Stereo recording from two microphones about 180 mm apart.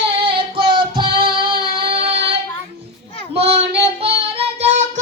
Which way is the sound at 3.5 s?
35° right (ahead or behind).